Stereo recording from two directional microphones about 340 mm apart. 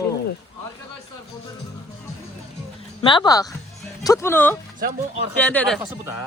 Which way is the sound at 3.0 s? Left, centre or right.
Centre.